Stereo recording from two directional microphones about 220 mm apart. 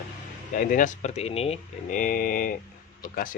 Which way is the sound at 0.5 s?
40° left (ahead or behind).